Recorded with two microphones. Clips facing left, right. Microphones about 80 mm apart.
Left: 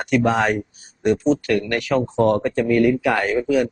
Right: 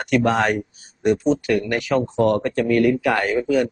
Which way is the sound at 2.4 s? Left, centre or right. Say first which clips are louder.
Left 1 dB; centre.